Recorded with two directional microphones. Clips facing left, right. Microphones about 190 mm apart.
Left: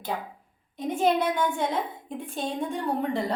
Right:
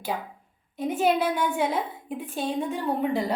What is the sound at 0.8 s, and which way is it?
A woman's voice, 5° right (ahead or behind).